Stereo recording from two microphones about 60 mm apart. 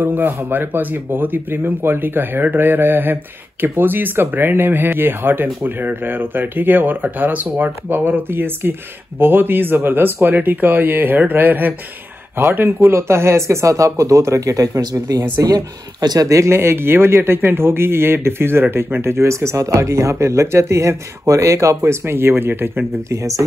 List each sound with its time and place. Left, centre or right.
0.0 s speech: right
12.5 s speech: right
14.8 s speech: right
16.2 s speech: right
23.0 s speech: right